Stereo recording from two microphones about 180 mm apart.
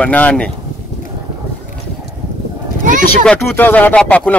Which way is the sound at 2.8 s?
45° right (ahead or behind).